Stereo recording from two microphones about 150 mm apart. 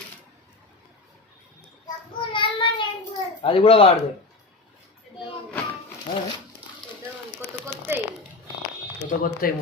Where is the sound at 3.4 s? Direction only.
35° left (ahead or behind).